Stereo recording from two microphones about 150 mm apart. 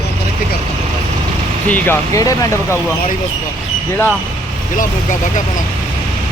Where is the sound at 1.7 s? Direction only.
20° left (ahead or behind).